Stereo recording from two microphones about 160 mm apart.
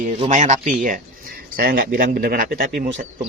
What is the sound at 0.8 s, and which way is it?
Speech, 60° right (ahead or behind).